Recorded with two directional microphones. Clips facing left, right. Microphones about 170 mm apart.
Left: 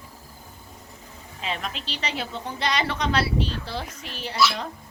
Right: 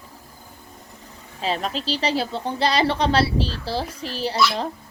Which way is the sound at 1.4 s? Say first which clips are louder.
Right 7 dB; 35° right (ahead or behind).